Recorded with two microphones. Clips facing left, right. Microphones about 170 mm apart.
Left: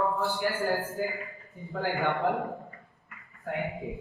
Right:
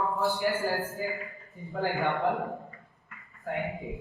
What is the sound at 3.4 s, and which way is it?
Speech, centre (ahead or behind).